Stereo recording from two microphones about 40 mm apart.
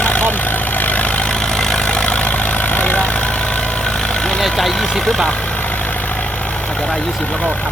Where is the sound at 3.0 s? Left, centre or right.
Left.